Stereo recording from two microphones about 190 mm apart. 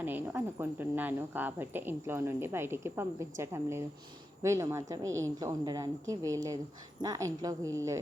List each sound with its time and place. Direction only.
0.0 s a woman's voice: 10° right (ahead or behind)